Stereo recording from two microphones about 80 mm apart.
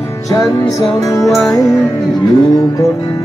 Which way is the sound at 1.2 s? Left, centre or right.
Left.